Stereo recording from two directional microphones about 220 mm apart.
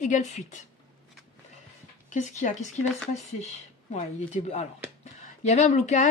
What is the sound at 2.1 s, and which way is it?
Speech, 35° left (ahead or behind).